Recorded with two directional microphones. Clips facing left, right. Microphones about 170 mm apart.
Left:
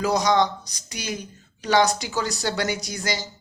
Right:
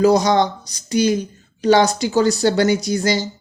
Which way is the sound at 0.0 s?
30° right (ahead or behind).